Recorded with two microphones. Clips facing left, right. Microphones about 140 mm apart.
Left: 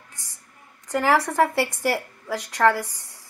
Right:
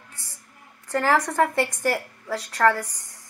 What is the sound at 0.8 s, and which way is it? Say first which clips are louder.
A woman's voice: left 1 dB; 15° left (ahead or behind).